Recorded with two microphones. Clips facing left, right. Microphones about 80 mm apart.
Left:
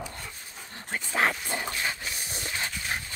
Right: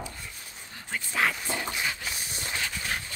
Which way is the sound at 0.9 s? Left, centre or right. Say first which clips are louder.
Left 1 dB; left.